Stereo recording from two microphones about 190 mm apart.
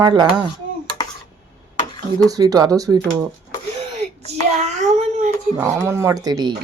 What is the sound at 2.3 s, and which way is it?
Speech, 20° right (ahead or behind).